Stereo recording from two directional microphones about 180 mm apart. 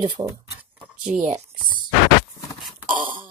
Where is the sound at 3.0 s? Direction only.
30° right (ahead or behind).